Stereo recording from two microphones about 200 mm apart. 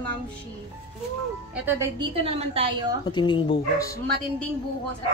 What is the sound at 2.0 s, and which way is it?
Speech, 30° right (ahead or behind).